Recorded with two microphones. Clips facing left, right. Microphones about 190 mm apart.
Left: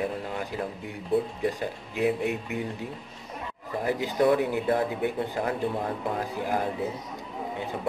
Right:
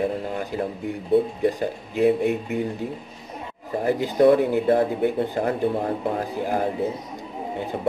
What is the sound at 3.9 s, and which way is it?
Speech, 35° right (ahead or behind).